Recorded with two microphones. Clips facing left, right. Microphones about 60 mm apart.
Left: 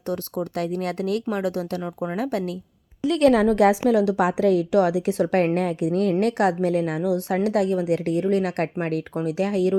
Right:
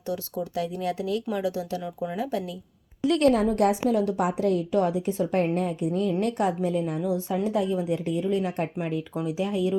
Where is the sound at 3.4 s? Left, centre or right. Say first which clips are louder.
Left 5 dB; left.